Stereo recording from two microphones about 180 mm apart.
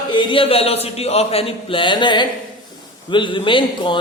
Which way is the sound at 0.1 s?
25° left (ahead or behind).